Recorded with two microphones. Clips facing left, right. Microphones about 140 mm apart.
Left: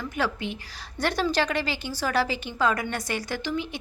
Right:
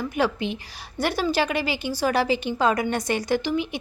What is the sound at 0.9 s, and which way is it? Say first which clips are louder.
A woman's voice: right 2 dB; 5° right (ahead or behind).